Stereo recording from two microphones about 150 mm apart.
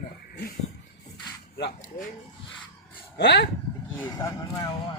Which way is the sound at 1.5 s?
90° left.